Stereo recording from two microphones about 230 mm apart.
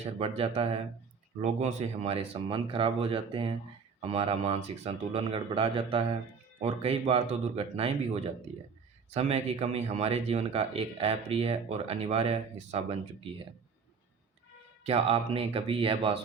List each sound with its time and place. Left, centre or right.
0.2 s speech: right
14.8 s speech: right